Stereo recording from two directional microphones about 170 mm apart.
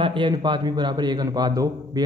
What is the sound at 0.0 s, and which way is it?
Speech, 30° right (ahead or behind).